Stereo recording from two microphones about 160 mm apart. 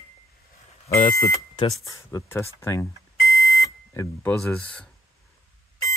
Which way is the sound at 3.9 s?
15° left (ahead or behind).